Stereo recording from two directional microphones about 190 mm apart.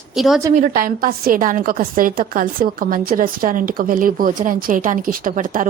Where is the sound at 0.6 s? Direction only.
50° right (ahead or behind).